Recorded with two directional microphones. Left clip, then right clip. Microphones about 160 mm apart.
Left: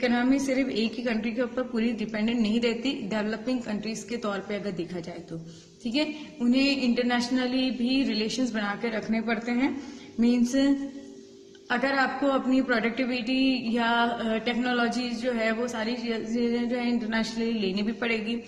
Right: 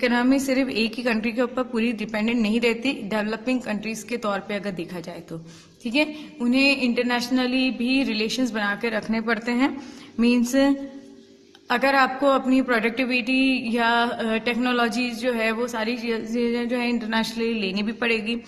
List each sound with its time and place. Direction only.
0.0 s a man's voice: 35° right (ahead or behind)